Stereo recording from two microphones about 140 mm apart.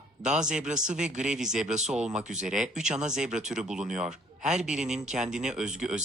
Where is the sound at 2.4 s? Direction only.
5° right (ahead or behind).